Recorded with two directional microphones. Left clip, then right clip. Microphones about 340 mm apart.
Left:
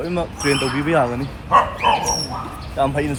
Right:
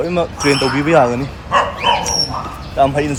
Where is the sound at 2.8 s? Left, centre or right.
Centre.